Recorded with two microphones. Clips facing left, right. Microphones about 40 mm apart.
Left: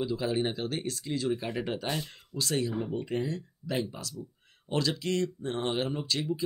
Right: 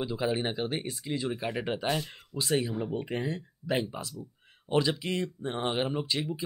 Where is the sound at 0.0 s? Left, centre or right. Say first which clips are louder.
Even; right.